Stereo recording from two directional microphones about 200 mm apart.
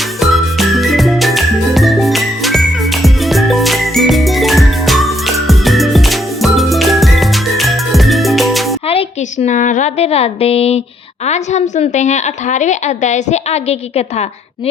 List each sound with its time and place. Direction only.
0.2 s music: centre (ahead or behind)
8.9 s a woman's voice: 30° left (ahead or behind)